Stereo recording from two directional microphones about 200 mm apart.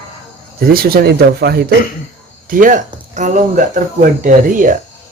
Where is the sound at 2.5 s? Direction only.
40° right (ahead or behind).